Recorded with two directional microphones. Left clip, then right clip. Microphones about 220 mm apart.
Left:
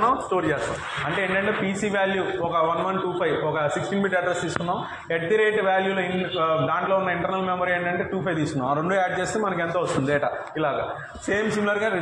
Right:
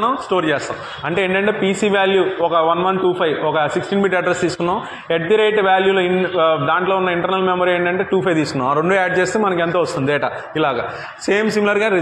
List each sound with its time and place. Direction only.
0.0 s a man's voice: 55° right (ahead or behind)